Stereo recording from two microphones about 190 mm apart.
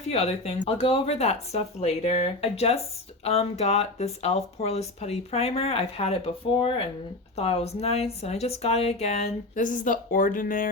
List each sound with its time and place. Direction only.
0.1 s speech: 35° left (ahead or behind)